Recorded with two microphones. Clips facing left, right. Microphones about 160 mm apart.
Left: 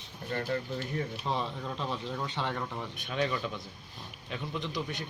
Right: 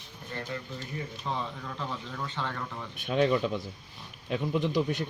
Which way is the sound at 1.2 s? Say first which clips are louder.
Left 1 dB; 15° left (ahead or behind).